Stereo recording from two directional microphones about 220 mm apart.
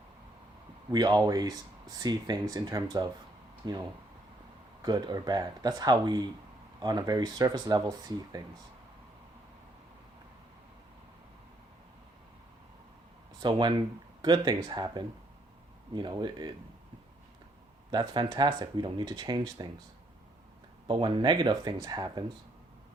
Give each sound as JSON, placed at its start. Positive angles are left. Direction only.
{"t": 0.9, "sound": "speech", "side_deg": -20}
{"t": 13.4, "sound": "speech", "side_deg": -20}
{"t": 17.9, "sound": "speech", "side_deg": -20}
{"t": 20.8, "sound": "speech", "side_deg": -20}